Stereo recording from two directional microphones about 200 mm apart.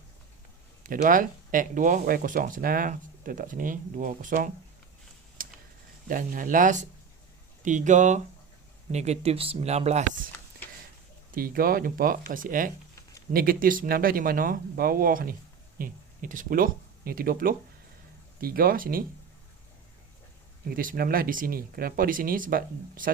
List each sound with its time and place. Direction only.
0.9 s speech: 45° right (ahead or behind)
5.4 s a sound: 45° right (ahead or behind)
6.1 s speech: 45° right (ahead or behind)
11.3 s speech: 45° right (ahead or behind)
20.7 s speech: 45° right (ahead or behind)